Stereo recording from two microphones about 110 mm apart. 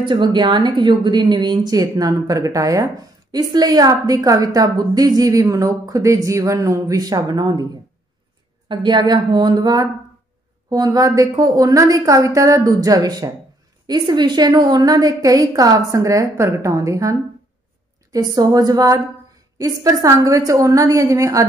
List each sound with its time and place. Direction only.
0.0 s a woman's voice: 50° right (ahead or behind)
8.6 s a woman's voice: 40° right (ahead or behind)